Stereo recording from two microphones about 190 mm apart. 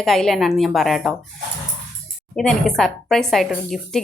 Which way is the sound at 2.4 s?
Centre (ahead or behind).